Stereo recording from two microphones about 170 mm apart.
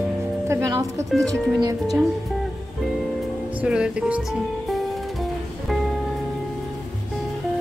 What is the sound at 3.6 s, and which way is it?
Speech, 5° right (ahead or behind).